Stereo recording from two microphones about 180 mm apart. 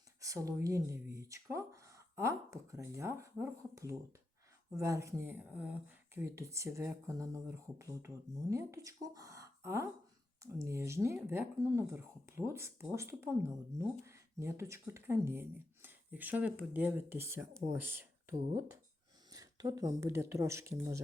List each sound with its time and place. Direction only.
0.2 s speech: 20° right (ahead or behind)